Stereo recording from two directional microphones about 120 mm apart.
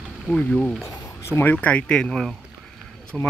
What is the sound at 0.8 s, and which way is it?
Speech, 25° left (ahead or behind).